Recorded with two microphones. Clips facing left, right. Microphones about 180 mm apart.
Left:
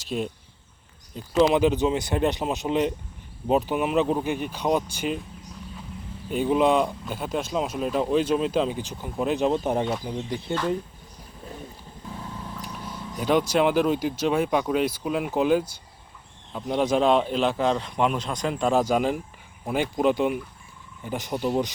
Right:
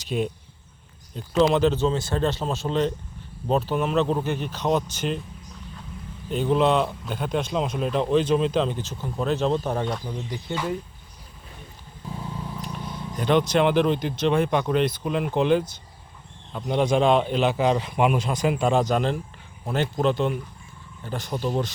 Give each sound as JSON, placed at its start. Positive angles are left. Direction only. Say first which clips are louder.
{"t": 0.0, "sound": "speech", "louder": "right 2 dB", "side_deg": 0}
{"t": 6.3, "sound": "speech", "louder": "even", "side_deg": 10}
{"t": 9.8, "sound": "speech", "louder": "left 1 dB", "side_deg": 5}
{"t": 10.1, "sound": "speech", "louder": "left 2 dB", "side_deg": 20}
{"t": 12.6, "sound": "speech", "louder": "right 2 dB", "side_deg": 5}
{"t": 18.7, "sound": "speech", "louder": "even", "side_deg": 5}